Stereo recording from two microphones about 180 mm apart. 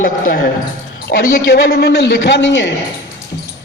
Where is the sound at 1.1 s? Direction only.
65° left (ahead or behind); by 2.7 s 90° left.